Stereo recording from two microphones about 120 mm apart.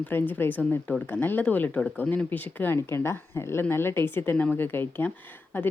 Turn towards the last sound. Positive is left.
turn(degrees=15)  # may be behind; listen again after turning